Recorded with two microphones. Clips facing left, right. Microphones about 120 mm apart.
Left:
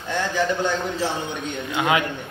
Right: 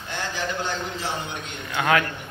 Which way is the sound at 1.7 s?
15° left (ahead or behind).